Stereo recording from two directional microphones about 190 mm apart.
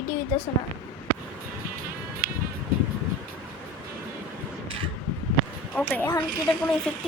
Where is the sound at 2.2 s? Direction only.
50° right (ahead or behind).